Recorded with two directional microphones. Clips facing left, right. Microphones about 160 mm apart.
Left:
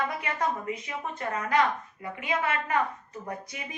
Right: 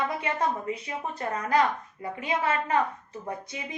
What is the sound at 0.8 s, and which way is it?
A woman's voice, 35° right (ahead or behind).